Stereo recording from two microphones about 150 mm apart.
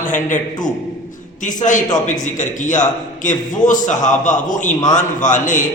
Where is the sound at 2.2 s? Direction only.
55° left (ahead or behind).